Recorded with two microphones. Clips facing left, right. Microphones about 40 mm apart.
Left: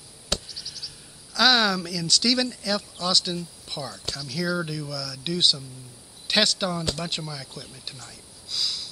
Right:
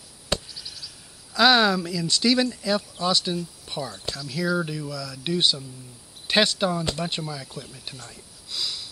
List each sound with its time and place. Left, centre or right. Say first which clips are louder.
0.3 s speech: right 2 dB; centre
3.6 s a sound: right 2 dB; centre
4.0 s speech: right 1 dB; centre